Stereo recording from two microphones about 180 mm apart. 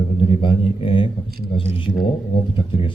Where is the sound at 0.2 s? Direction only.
30° left (ahead or behind).